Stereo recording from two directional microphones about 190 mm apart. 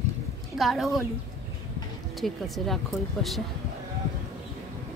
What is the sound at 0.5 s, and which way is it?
Speech, centre (ahead or behind).